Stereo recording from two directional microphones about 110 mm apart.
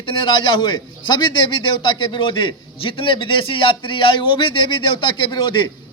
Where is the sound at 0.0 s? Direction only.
50° left (ahead or behind).